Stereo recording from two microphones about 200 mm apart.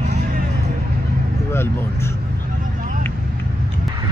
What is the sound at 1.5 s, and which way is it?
Speech, 10° left (ahead or behind).